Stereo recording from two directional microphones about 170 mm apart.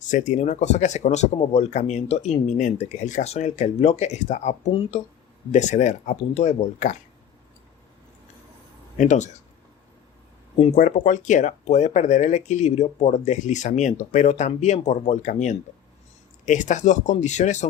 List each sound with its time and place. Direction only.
0.1 s speech: 45° left (ahead or behind)
9.0 s speech: 45° left (ahead or behind)
10.8 s speech: 50° left (ahead or behind)